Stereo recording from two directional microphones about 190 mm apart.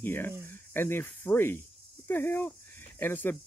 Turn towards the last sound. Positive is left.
turn(degrees=10)  # may be behind; listen again after turning